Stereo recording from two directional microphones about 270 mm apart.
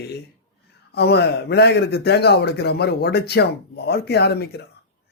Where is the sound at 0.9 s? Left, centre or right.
Left.